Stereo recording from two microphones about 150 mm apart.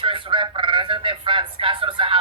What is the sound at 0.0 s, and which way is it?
A woman's voice, 35° right (ahead or behind).